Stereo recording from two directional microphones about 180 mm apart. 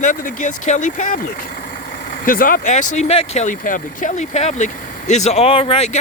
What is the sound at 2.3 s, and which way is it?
Speech, 50° left (ahead or behind).